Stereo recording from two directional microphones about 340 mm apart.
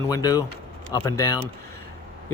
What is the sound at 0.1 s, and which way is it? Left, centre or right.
Speech, centre.